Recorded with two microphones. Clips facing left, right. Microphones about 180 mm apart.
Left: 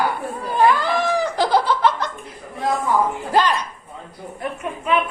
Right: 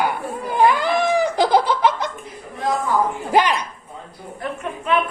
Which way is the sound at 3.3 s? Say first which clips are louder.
Right 1 dB; 15° right (ahead or behind).